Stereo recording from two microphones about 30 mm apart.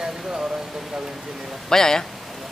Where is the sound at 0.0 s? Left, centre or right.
Right.